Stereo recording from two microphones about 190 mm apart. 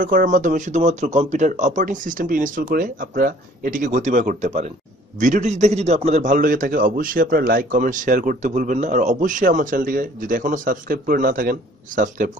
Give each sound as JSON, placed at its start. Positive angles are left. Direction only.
{"t": 0.0, "sound": "a man's voice", "side_deg": -45}